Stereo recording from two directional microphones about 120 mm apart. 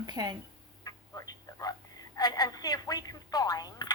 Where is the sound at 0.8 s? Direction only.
30° left (ahead or behind).